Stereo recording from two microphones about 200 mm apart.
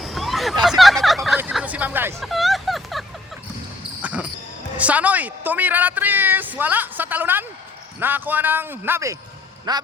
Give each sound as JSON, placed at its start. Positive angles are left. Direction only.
{"t": 0.0, "sound": "a sound", "side_deg": 0}
{"t": 1.4, "sound": "hubbub", "side_deg": -5}
{"t": 2.3, "sound": "a sound", "side_deg": 0}
{"t": 4.0, "sound": "basketball bounce", "side_deg": -5}
{"t": 4.8, "sound": "a woman's voice", "side_deg": -5}
{"t": 9.7, "sound": "quack", "side_deg": -20}